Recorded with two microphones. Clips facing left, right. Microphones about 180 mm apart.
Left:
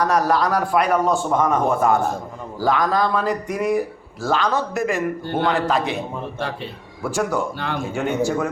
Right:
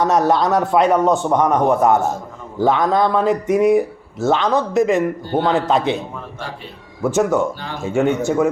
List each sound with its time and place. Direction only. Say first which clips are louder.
0.0 s a man's voice: right 3 dB; 25° right (ahead or behind)
7.0 s a man's voice: right 6 dB; 20° right (ahead or behind)